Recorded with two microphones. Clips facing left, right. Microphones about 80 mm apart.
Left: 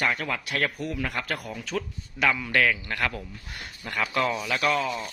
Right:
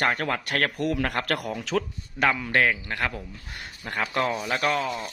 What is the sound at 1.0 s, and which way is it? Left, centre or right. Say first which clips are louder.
Speech: right 4 dB; right.